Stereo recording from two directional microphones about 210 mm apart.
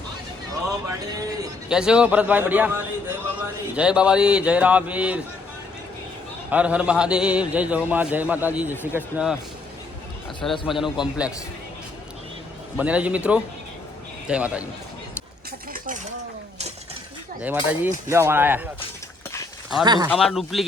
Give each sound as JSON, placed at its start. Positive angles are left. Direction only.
{"t": 0.7, "sound": "a sound", "side_deg": -15}
{"t": 1.7, "sound": "a man's voice", "side_deg": -5}
{"t": 6.5, "sound": "a man's voice", "side_deg": -5}
{"t": 10.7, "sound": "speech", "side_deg": 0}
{"t": 12.7, "sound": "a man's voice", "side_deg": -5}
{"t": 17.4, "sound": "a man's voice", "side_deg": -10}
{"t": 19.8, "sound": "speech", "side_deg": -20}
{"t": 20.1, "sound": "speech", "side_deg": 0}